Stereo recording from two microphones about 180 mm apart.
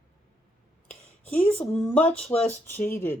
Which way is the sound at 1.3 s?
5° left (ahead or behind).